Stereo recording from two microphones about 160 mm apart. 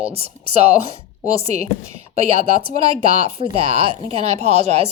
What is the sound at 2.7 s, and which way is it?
A woman's voice, 40° right (ahead or behind).